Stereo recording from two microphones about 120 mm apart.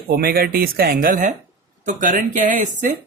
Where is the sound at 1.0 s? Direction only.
90° right.